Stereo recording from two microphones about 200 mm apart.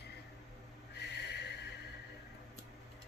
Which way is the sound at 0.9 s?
55° left (ahead or behind).